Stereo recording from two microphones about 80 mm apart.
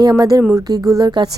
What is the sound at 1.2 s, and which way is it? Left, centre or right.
Speech, right.